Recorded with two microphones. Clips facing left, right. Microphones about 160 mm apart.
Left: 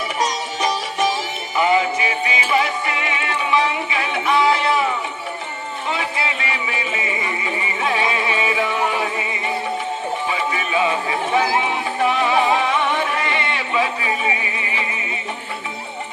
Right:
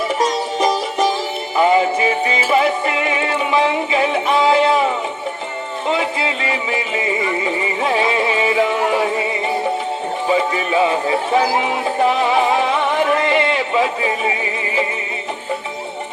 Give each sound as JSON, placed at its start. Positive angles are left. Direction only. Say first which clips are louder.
{"t": 1.5, "sound": "music", "louder": "right 3 dB", "side_deg": -40}
{"t": 6.0, "sound": "speech", "louder": "right 4 dB", "side_deg": -35}
{"t": 7.4, "sound": "music", "louder": "right 4 dB", "side_deg": -35}
{"t": 10.2, "sound": "speech", "louder": "right 6 dB", "side_deg": -35}
{"t": 12.0, "sound": "music", "louder": "right 1 dB", "side_deg": -35}